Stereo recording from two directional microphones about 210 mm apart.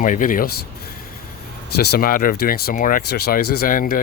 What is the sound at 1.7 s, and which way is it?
Speech, 50° left (ahead or behind).